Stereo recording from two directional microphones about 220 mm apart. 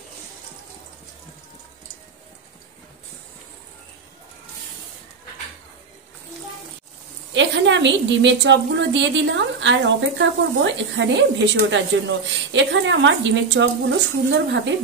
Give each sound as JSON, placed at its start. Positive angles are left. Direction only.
{"t": 7.3, "sound": "a woman's voice", "side_deg": -55}